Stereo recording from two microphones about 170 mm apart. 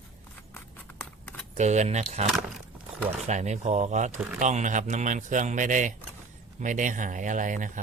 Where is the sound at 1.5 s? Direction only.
45° right (ahead or behind).